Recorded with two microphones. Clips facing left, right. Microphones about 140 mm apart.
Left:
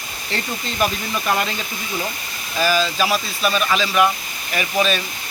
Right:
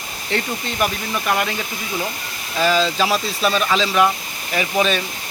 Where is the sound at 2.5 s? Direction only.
25° right (ahead or behind).